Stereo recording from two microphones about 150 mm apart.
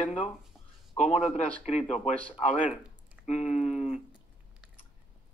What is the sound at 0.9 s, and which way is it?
Speech, 50° left (ahead or behind).